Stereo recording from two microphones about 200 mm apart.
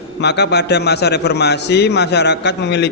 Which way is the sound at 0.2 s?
60° left (ahead or behind).